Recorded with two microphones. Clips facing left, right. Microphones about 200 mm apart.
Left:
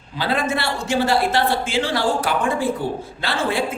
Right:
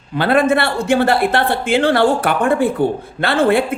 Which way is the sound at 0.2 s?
60° right (ahead or behind).